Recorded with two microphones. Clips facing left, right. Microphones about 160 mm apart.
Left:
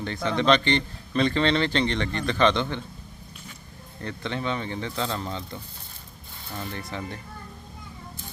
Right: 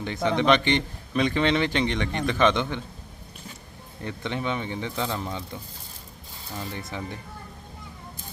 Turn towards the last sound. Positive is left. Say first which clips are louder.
# even
turn(degrees=-15)  # may be behind; listen again after turning